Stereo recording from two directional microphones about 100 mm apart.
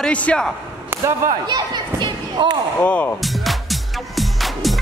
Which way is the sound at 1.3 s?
45° right (ahead or behind).